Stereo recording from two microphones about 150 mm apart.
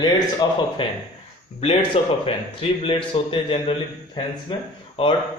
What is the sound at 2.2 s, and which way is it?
A man's voice, 40° left (ahead or behind).